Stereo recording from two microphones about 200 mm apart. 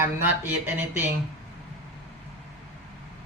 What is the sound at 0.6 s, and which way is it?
Speech, 10° right (ahead or behind).